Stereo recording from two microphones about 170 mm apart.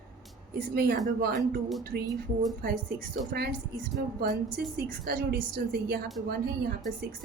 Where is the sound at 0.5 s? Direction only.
65° right (ahead or behind).